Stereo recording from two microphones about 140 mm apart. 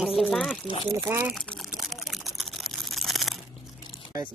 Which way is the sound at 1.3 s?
Centre (ahead or behind).